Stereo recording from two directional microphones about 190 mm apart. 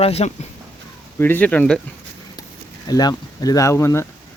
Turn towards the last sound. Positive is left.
turn(degrees=15)  # may be behind; listen again after turning